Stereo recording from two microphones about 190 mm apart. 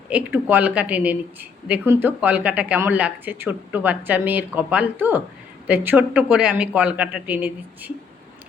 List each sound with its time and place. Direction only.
0.1 s speech: 10° right (ahead or behind)